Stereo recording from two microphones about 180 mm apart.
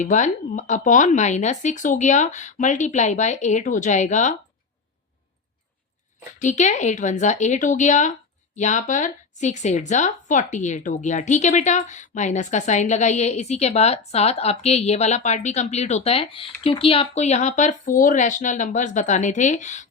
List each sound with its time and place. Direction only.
0.0 s speech: 45° left (ahead or behind)
6.4 s speech: 45° left (ahead or behind)